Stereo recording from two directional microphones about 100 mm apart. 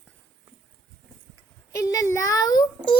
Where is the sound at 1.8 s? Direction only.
35° left (ahead or behind).